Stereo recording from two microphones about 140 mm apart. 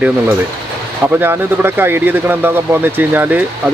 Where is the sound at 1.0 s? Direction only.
15° right (ahead or behind).